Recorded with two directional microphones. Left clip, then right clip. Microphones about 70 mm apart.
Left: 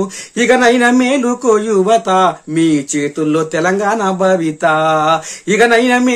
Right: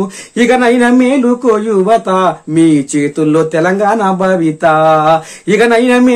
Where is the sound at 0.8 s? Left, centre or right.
Left.